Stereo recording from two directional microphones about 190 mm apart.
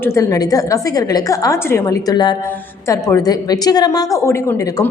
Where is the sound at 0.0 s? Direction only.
15° left (ahead or behind).